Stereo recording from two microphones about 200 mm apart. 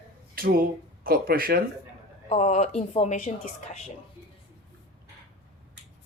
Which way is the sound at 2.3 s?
35° left (ahead or behind).